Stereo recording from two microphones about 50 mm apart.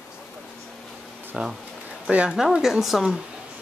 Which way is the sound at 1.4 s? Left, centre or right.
Right.